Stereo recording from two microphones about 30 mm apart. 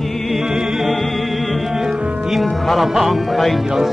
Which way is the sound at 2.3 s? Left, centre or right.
Centre.